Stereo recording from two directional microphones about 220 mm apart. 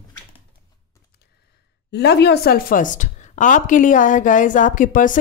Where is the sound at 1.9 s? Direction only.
50° left (ahead or behind).